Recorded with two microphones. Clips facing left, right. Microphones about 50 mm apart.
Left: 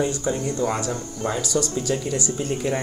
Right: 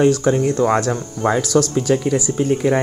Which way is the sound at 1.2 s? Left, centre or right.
Right.